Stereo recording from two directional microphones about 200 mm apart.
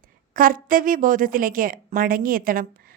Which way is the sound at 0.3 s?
45° right (ahead or behind).